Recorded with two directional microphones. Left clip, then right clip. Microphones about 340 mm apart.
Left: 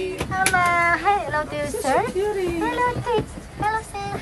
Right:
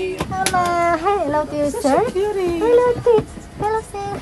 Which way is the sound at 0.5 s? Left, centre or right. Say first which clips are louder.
Right 2 dB; centre.